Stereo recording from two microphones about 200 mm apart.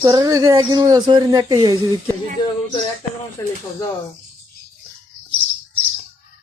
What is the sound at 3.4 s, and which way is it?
Speech, 15° left (ahead or behind).